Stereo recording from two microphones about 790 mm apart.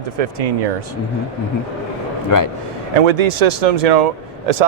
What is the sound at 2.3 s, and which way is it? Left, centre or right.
Speech, left.